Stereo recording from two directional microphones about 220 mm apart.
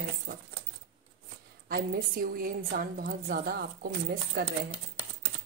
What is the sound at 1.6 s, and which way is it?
A woman's voice, 40° right (ahead or behind).